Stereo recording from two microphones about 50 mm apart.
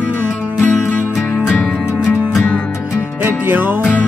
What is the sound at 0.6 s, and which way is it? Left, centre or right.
Music, left.